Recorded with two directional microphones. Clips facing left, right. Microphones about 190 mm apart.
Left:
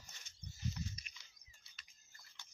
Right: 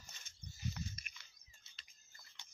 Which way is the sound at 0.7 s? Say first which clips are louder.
Even; 55° right (ahead or behind).